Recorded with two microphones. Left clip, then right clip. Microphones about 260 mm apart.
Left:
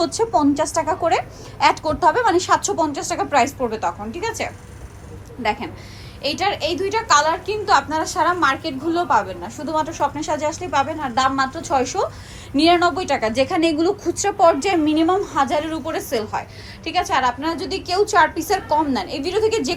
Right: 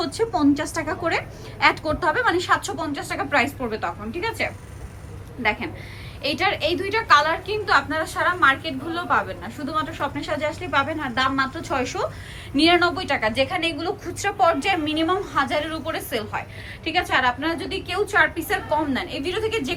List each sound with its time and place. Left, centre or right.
0.0 s a woman's voice: centre